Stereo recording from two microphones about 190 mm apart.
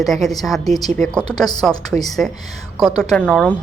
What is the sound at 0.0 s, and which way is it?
A woman's voice, centre (ahead or behind).